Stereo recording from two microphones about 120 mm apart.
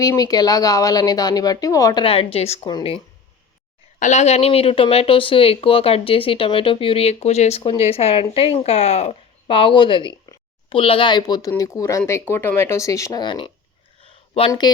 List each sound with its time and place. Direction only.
0.0 s speech: 30° left (ahead or behind)
2.0 s speech: 50° left (ahead or behind)
2.6 s speech: 45° left (ahead or behind)
4.0 s speech: 70° left (ahead or behind); by 13.2 s 25° left (ahead or behind)
13.2 s speech: 45° left (ahead or behind)
14.0 s a sound: 50° left (ahead or behind)